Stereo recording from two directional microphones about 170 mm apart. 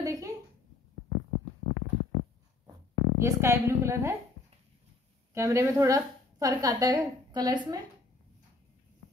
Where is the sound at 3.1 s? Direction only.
15° right (ahead or behind).